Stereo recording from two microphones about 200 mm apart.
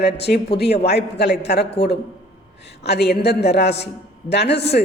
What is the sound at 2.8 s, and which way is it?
A woman's voice, 55° left (ahead or behind).